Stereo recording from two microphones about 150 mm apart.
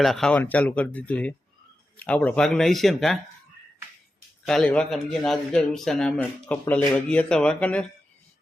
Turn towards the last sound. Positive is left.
turn(degrees=5)  # may be behind; listen again after turning